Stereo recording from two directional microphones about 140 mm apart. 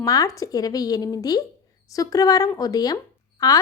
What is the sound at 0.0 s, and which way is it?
A woman's voice, 25° left (ahead or behind).